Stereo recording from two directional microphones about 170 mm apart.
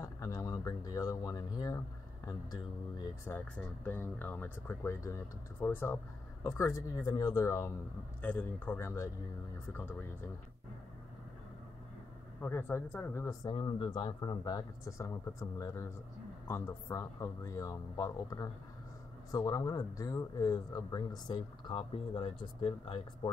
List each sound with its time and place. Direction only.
0.0 s speech: 15° left (ahead or behind)
3.3 s speech: 10° left (ahead or behind)
12.4 s speech: 15° left (ahead or behind); by 23.3 s 30° left (ahead or behind)